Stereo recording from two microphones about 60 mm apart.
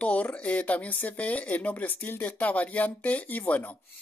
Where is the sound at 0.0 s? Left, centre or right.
Left.